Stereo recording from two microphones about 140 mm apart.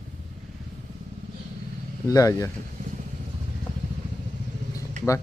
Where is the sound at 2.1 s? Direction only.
25° left (ahead or behind).